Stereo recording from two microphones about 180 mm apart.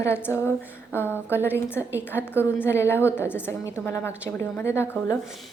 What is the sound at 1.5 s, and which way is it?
Speech, 10° right (ahead or behind).